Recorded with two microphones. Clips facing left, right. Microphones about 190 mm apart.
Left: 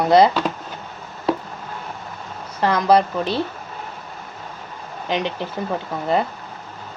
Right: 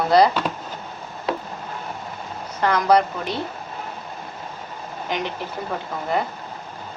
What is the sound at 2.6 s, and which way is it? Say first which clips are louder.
Speech: left 1 dB; 30° left (ahead or behind).